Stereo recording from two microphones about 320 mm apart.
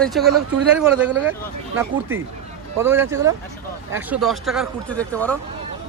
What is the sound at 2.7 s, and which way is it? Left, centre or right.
A woman's voice, centre.